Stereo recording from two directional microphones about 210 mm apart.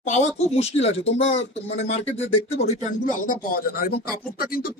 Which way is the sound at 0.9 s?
60° left (ahead or behind).